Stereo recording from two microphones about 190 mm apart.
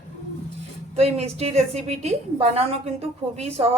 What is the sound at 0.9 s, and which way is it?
A woman's voice, 35° right (ahead or behind).